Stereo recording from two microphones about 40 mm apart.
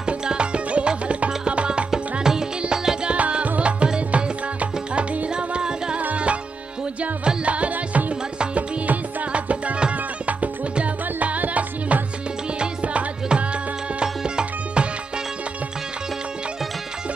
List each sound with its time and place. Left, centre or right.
0.0 s music: right
2.1 s music: centre
3.1 s music: right
4.6 s music: right
5.3 s music: right
5.9 s tabla: right
7.2 s music: right
14.0 s music: right